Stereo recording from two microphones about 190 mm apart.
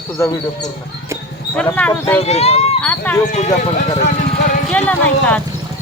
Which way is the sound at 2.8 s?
5° left (ahead or behind).